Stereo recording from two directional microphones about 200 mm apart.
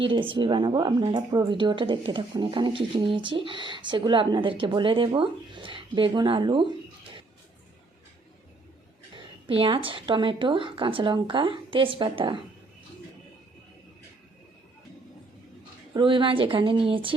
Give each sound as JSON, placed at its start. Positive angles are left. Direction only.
{"t": 0.0, "sound": "speech", "side_deg": -25}
{"t": 9.1, "sound": "speech", "side_deg": -25}
{"t": 16.0, "sound": "speech", "side_deg": -25}